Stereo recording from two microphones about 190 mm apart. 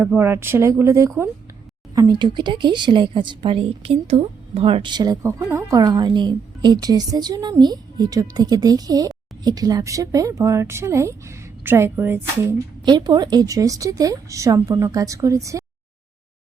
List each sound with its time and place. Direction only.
0.0 s a woman's voice: 10° right (ahead or behind)
12.8 s a woman's voice: 20° right (ahead or behind)